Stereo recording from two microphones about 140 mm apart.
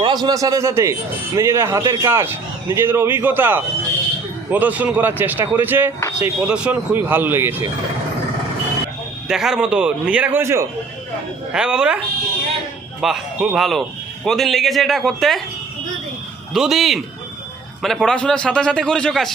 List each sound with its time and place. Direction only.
0.0 s a man's voice: 30° right (ahead or behind)
9.2 s speech: 5° right (ahead or behind); by 10.7 s 20° right (ahead or behind)
11.5 s speech: 5° right (ahead or behind)
13.0 s a man's voice: 5° right (ahead or behind)
16.6 s a man's voice: centre (ahead or behind)